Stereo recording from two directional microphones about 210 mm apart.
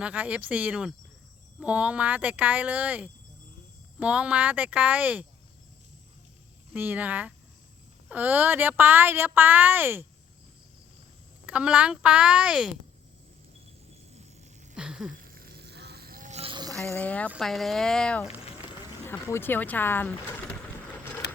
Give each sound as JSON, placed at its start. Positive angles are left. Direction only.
{"t": 0.0, "sound": "a woman's voice", "side_deg": -5}
{"t": 6.7, "sound": "a woman's voice", "side_deg": -10}
{"t": 11.4, "sound": "a woman's voice", "side_deg": -5}
{"t": 14.8, "sound": "a woman's voice", "side_deg": -5}
{"t": 15.1, "sound": "vehicle", "side_deg": -45}
{"t": 16.7, "sound": "a woman's voice", "side_deg": 10}